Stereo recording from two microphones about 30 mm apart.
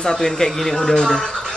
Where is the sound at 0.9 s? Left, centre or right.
Left.